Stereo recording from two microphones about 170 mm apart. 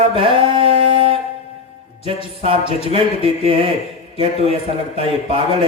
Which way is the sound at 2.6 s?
35° left (ahead or behind).